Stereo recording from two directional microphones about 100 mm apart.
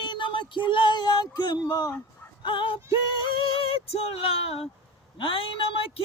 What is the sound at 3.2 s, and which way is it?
Speech, 60° left (ahead or behind).